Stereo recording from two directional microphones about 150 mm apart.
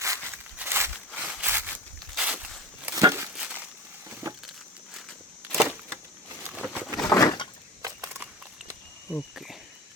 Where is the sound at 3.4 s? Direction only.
5° right (ahead or behind).